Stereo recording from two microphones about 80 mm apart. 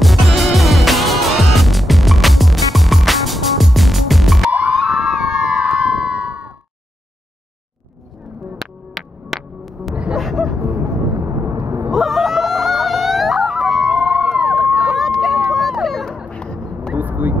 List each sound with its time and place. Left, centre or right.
0.0 s music: centre
4.5 s howl: centre
8.5 s music: centre
10.1 s gasp: centre
10.6 s vehicle: right
11.9 s a sound: centre
14.7 s run: centre
15.0 s vehicle: centre
15.5 s music: centre
16.3 s a sound: centre
16.9 s vehicle: right